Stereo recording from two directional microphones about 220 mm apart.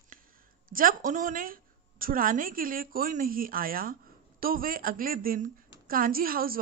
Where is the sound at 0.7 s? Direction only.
40° right (ahead or behind).